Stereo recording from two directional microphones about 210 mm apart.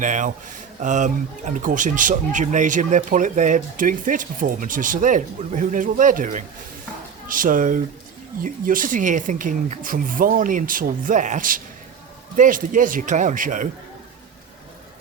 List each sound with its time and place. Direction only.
0.0 s speech: 35° right (ahead or behind)